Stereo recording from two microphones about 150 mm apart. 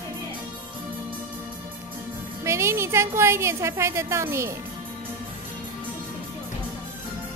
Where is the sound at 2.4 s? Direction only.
20° right (ahead or behind).